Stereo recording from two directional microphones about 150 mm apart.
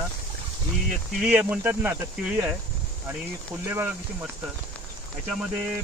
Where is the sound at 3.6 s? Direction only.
15° right (ahead or behind).